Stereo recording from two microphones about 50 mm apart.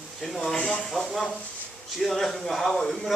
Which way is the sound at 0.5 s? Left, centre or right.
Centre.